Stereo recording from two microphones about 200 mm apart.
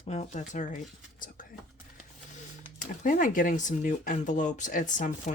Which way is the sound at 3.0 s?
40° left (ahead or behind).